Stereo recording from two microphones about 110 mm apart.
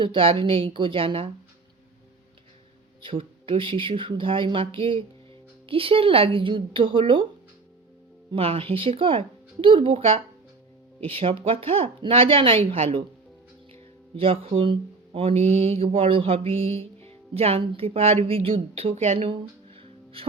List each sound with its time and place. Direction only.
0.0 s speech: 50° right (ahead or behind)
3.0 s speech: 50° right (ahead or behind)
8.3 s speech: 55° right (ahead or behind)
14.2 s speech: 60° right (ahead or behind)